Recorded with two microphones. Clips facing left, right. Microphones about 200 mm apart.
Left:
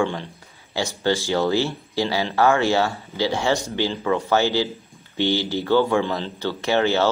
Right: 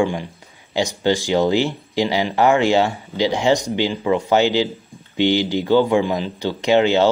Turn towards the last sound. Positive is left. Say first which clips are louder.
# right 5 dB
turn(degrees=-15)  # may be behind; listen again after turning